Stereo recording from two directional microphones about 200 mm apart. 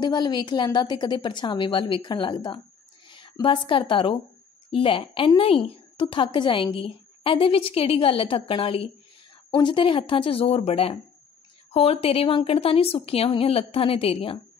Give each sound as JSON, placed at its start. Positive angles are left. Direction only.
{"t": 0.0, "sound": "a woman's voice", "side_deg": 20}